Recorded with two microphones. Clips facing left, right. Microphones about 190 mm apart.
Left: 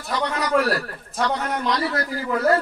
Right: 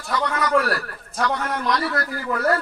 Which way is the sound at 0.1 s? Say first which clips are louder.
Right 1 dB; 25° left (ahead or behind).